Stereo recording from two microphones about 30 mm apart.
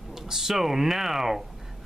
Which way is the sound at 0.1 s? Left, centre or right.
Centre.